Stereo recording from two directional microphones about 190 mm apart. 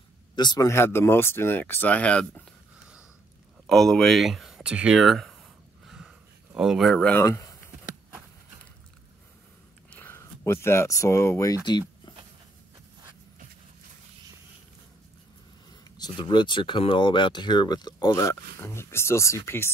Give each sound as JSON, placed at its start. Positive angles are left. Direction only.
{"t": 0.4, "sound": "speech", "side_deg": 20}
{"t": 3.6, "sound": "speech", "side_deg": 0}
{"t": 5.9, "sound": "a sound", "side_deg": -5}
{"t": 9.9, "sound": "speech", "side_deg": 10}
{"t": 16.0, "sound": "speech", "side_deg": 25}